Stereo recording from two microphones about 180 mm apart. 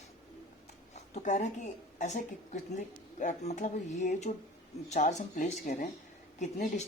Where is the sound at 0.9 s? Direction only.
40° left (ahead or behind).